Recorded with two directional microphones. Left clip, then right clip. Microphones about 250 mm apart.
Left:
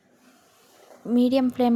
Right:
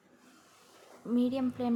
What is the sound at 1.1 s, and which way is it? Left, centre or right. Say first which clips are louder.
Speech: left 10 dB; left.